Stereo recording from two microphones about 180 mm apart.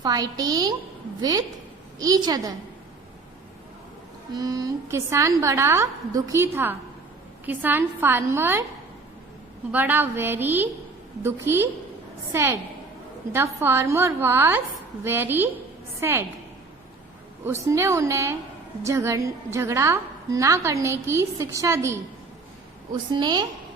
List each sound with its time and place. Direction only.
0.0 s a woman's voice: 20° right (ahead or behind)
4.4 s a woman's voice: 20° right (ahead or behind)
9.7 s a woman's voice: 10° right (ahead or behind)
17.4 s a woman's voice: 15° right (ahead or behind)
23.1 s a woman's voice: 25° right (ahead or behind)